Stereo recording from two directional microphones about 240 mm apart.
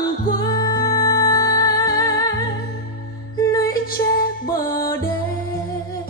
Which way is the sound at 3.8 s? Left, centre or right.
Left.